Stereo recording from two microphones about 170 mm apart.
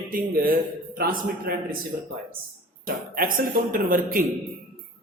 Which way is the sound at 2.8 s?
55° right (ahead or behind).